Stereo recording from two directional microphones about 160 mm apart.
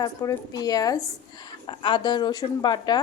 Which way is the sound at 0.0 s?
20° left (ahead or behind).